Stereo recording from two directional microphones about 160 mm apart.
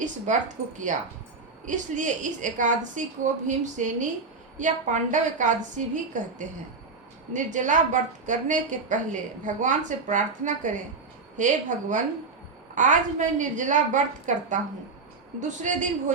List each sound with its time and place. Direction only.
0.0 s a woman's voice: 50° right (ahead or behind)